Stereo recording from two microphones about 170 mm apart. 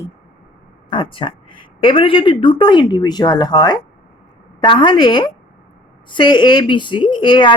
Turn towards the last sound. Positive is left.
turn(degrees=25)  # may be behind; listen again after turning